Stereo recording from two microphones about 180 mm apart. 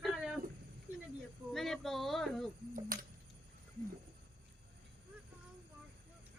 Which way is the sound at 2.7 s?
50° right (ahead or behind).